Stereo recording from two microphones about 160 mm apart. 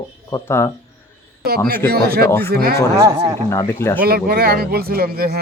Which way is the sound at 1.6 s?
75° right (ahead or behind).